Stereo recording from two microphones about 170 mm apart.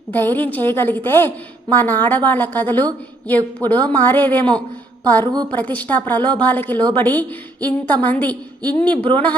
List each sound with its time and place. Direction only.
0.1 s a woman's voice: 10° left (ahead or behind)
5.2 s a woman's voice: 25° right (ahead or behind)
5.5 s a woman's voice: 10° left (ahead or behind)
9.0 s a woman's voice: 30° right (ahead or behind)